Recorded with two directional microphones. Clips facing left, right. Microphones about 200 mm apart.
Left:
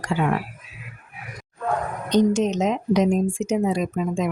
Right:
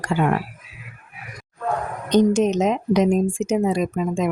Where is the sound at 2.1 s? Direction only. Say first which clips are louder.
Right 2 dB; 50° right (ahead or behind).